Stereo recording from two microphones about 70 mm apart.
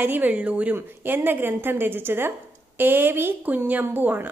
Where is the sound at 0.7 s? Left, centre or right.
Right.